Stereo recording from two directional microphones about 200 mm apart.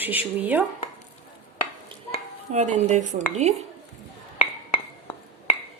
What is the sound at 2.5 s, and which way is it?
Speech, 35° right (ahead or behind).